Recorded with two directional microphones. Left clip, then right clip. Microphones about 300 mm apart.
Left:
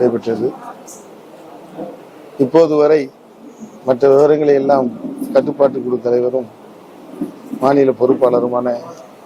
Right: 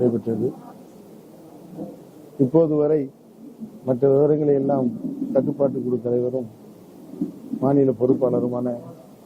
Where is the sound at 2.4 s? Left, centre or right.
Centre.